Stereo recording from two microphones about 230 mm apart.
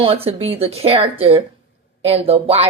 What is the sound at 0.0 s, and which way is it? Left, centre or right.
Speech, right.